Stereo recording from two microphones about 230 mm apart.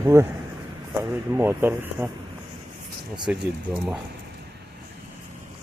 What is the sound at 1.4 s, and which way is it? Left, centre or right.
Speech, centre.